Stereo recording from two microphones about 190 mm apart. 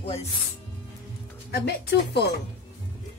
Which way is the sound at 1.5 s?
60° left (ahead or behind).